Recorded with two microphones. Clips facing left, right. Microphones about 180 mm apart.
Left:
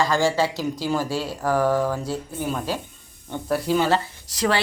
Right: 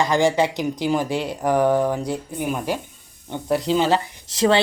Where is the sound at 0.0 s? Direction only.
20° right (ahead or behind).